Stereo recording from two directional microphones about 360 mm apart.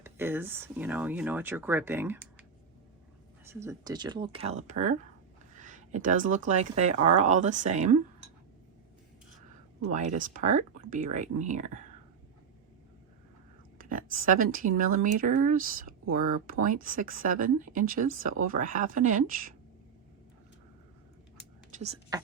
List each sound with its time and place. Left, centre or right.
0.0 s speech: centre
3.4 s speech: centre
9.9 s speech: centre
13.7 s speech: right
22.1 s speech: centre